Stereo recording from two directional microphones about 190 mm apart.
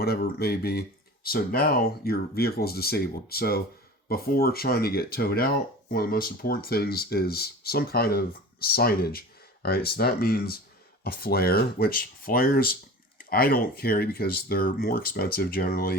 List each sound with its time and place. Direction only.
0.0 s speech: 55° left (ahead or behind)